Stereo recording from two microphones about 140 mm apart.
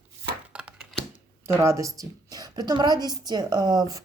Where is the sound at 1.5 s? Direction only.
20° right (ahead or behind).